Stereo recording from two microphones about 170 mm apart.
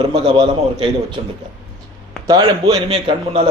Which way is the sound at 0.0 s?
30° right (ahead or behind).